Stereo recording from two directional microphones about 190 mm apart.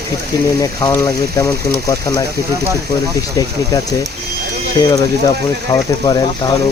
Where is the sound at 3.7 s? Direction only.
20° left (ahead or behind).